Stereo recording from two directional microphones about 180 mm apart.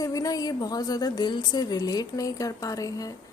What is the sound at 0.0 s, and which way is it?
A woman's voice, 20° left (ahead or behind).